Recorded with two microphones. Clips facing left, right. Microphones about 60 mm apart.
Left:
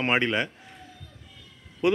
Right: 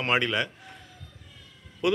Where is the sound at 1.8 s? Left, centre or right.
Left.